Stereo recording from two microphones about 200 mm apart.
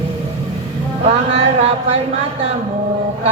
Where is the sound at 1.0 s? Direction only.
35° right (ahead or behind).